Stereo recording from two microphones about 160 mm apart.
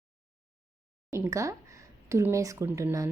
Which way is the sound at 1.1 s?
20° right (ahead or behind).